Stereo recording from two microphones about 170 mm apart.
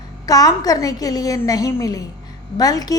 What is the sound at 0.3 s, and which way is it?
A woman's voice, 20° left (ahead or behind).